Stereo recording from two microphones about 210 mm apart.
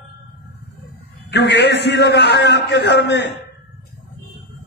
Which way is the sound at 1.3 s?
55° left (ahead or behind).